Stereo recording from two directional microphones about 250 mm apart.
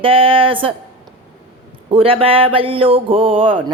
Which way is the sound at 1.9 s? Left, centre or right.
Right.